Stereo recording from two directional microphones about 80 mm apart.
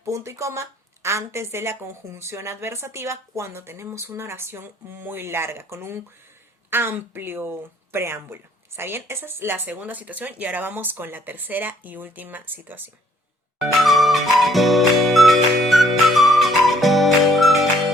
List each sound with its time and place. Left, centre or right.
0.0 s a woman's voice: right
13.6 s music: centre